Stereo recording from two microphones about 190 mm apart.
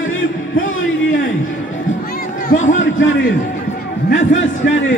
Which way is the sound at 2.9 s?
85° left.